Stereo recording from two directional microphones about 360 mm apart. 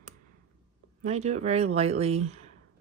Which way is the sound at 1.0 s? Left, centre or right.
Centre.